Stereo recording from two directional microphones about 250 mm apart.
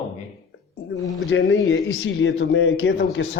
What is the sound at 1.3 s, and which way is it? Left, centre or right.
A man's voice, left.